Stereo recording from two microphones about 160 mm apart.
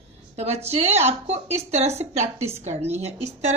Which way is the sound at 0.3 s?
40° right (ahead or behind).